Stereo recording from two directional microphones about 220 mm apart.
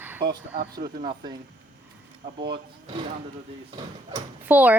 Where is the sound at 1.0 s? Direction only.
20° right (ahead or behind).